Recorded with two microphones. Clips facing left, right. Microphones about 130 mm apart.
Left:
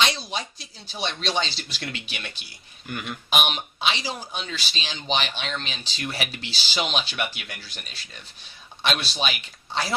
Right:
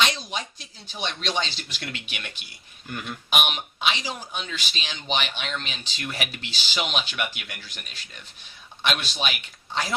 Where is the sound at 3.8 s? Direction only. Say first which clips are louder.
Even; 35° left (ahead or behind).